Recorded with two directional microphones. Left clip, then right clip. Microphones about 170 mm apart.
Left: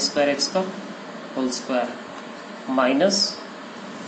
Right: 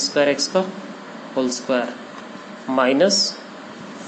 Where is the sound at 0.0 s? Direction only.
75° right (ahead or behind).